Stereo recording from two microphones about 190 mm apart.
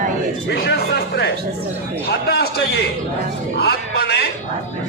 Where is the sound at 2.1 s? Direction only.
55° left (ahead or behind).